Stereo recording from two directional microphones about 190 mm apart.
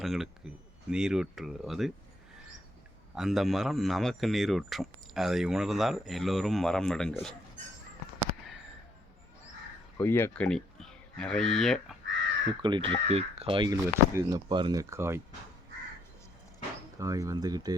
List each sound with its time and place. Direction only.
0.0 s speech: centre (ahead or behind)
3.2 s speech: centre (ahead or behind)
10.0 s speech: 10° left (ahead or behind)
12.6 s speech: 25° right (ahead or behind)
13.8 s speech: 15° right (ahead or behind)
17.0 s speech: 15° right (ahead or behind)